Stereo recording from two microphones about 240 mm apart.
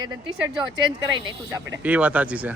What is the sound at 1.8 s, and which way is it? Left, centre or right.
Speech, centre.